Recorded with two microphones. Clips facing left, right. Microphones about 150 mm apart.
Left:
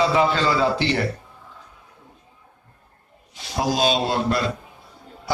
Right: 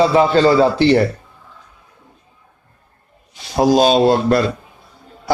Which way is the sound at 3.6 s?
40° right (ahead or behind).